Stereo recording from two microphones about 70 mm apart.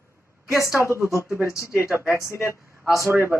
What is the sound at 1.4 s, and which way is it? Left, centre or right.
Speech, left.